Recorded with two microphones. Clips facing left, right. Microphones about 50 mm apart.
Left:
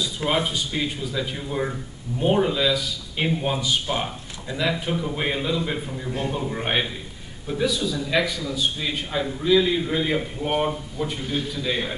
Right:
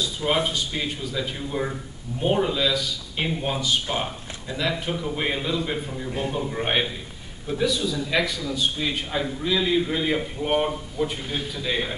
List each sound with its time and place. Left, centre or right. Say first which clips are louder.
0.3 s speech: even; centre